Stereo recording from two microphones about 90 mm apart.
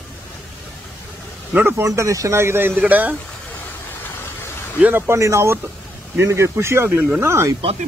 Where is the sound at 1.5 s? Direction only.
20° right (ahead or behind).